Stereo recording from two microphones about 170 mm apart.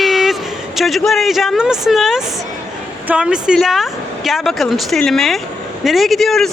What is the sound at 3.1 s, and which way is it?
A woman's voice, 5° right (ahead or behind).